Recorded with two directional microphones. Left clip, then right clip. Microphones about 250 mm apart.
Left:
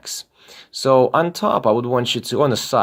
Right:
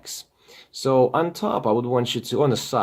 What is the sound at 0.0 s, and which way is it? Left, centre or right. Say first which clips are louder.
Speech: left 6 dB; left.